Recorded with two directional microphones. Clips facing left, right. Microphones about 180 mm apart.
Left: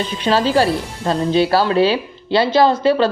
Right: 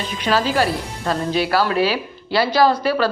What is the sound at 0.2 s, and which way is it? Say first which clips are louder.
Speech: left 3 dB; 30° left (ahead or behind).